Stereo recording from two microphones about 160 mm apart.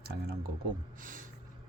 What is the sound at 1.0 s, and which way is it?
Speech, 60° right (ahead or behind).